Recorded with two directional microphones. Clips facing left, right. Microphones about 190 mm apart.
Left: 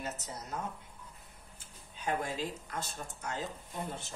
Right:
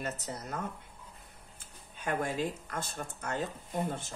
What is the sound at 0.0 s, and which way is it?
Speech, 60° right (ahead or behind).